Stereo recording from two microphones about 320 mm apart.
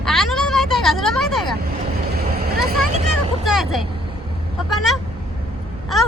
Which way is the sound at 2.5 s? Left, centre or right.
Right.